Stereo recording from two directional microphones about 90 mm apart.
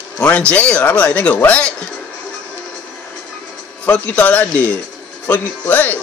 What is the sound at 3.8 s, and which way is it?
Speech, 20° left (ahead or behind).